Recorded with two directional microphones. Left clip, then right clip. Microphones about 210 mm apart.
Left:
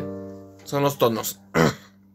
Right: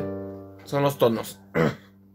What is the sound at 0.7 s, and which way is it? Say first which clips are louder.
Speech: left 1 dB; 15° left (ahead or behind).